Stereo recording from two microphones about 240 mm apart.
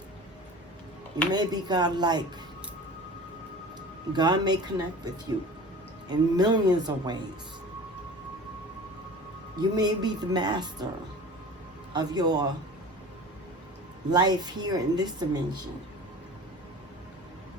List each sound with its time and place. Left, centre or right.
1.3 s a woman's voice: centre
4.1 s a woman's voice: centre
9.6 s a woman's voice: centre
11.9 s a woman's voice: centre
14.1 s a woman's voice: centre